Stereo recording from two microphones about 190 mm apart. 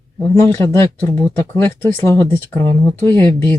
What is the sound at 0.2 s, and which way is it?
Speech, 15° left (ahead or behind).